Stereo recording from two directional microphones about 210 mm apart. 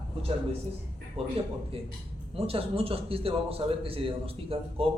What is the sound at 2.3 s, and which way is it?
A man's voice, 25° right (ahead or behind).